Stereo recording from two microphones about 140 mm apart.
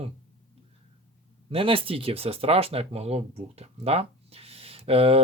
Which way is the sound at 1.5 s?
40° right (ahead or behind).